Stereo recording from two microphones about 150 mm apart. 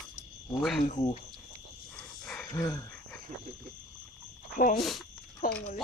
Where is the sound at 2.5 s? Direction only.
20° left (ahead or behind).